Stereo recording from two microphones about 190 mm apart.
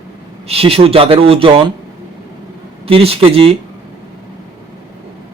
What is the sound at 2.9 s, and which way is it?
Speech, 30° right (ahead or behind).